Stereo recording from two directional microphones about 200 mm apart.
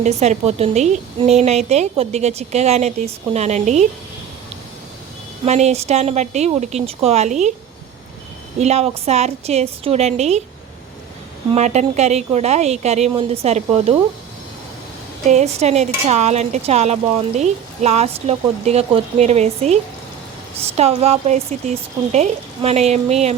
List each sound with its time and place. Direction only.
0.0 s speech: 35° right (ahead or behind)
5.5 s speech: 35° right (ahead or behind)
8.5 s speech: 35° right (ahead or behind)
11.5 s speech: 35° right (ahead or behind)
15.3 s speech: 35° right (ahead or behind)